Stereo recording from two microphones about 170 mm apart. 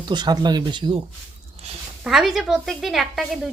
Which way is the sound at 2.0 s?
Centre (ahead or behind).